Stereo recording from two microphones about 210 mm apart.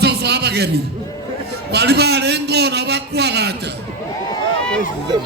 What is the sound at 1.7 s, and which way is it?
A man's voice, 50° right (ahead or behind).